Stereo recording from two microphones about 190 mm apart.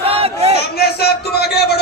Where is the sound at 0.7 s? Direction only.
55° left (ahead or behind).